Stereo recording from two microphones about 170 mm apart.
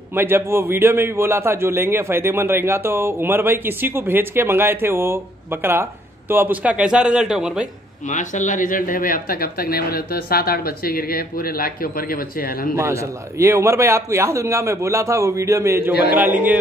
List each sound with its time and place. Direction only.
0.1 s a man's voice: 15° right (ahead or behind)
8.1 s speech: 45° left (ahead or behind)
12.7 s a man's voice: 15° right (ahead or behind)
15.9 s a man's voice: 70° left (ahead or behind)
16.2 s a man's voice: 10° right (ahead or behind)